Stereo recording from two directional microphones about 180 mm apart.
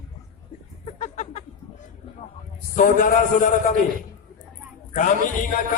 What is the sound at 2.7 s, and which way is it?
A man's voice, 50° left (ahead or behind).